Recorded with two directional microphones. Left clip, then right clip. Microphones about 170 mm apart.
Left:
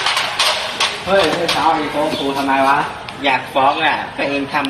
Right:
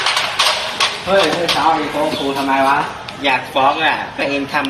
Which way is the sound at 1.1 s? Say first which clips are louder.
Even; 10° left (ahead or behind).